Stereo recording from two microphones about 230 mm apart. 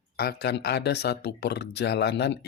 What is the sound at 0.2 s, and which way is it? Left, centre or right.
Speech, left.